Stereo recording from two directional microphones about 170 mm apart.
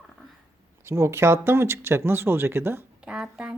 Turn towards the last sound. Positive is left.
turn(degrees=-5)  # may be behind; listen again after turning